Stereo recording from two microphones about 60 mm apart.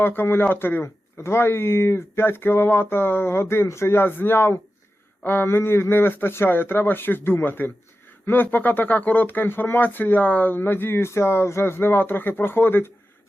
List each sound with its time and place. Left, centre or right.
0.0 s speech: left